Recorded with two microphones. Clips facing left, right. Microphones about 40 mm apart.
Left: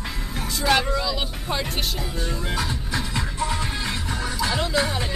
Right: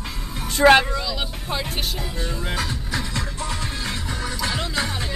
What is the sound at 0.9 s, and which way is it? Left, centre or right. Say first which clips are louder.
Speech: left 2 dB; centre.